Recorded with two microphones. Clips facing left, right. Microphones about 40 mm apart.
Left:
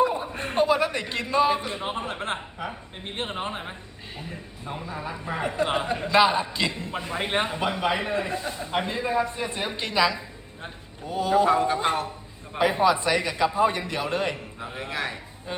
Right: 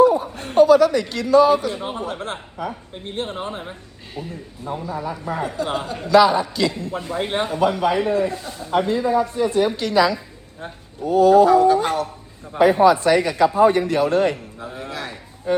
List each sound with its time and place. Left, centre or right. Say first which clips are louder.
0.0 s a sound: right 8 dB; left
2.0 s a man's voice: right 2 dB; left
3.6 s a man's voice: right 2 dB; centre; by 10.2 s left
11.1 s a man's voice: right 10 dB; centre
11.4 s a man's voice: right 7 dB; left